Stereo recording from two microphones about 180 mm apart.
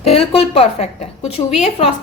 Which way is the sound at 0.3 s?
35° left (ahead or behind).